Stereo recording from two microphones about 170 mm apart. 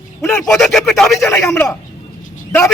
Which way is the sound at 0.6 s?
Centre (ahead or behind).